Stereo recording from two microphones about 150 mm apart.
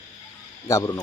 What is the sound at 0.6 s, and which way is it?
Speech, 20° left (ahead or behind).